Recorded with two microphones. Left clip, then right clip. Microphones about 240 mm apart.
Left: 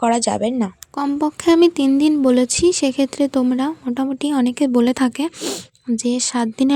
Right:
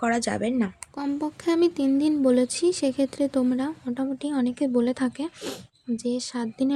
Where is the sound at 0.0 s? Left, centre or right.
Centre.